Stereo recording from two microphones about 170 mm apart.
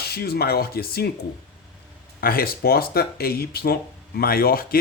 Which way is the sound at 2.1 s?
60° left (ahead or behind).